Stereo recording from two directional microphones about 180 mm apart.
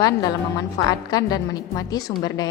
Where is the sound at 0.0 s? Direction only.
20° left (ahead or behind).